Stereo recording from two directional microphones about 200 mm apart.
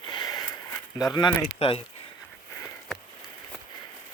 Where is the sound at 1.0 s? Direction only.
20° left (ahead or behind).